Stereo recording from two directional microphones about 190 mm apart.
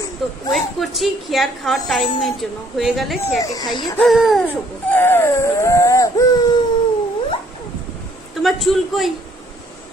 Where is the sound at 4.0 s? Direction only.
Centre (ahead or behind).